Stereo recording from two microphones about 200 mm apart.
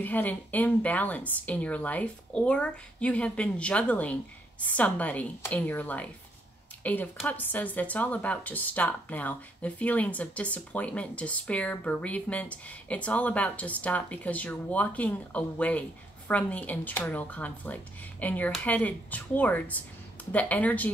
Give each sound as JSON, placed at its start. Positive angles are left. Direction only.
{"t": 0.0, "sound": "speech", "side_deg": 10}